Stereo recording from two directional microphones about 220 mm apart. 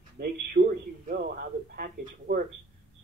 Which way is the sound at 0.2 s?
45° right (ahead or behind).